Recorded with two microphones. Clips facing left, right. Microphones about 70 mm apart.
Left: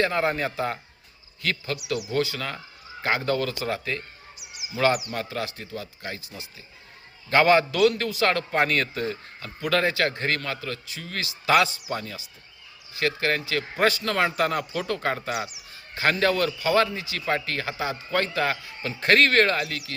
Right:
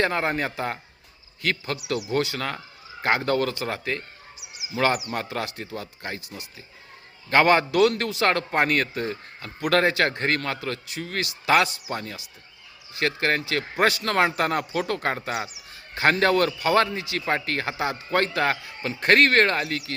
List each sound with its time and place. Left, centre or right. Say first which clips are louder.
0.0 s a man's voice: even; right
7.3 s a man's voice: even; right
8.3 s a man's voice: right 2 dB; right
9.7 s a man's voice: right 2 dB; right
16.2 s a man's voice: right 2 dB; right